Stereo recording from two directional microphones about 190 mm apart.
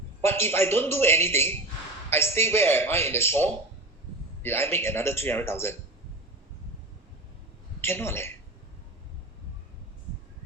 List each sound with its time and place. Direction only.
0.2 s a man's voice: 10° left (ahead or behind)
7.8 s a man's voice: 10° left (ahead or behind)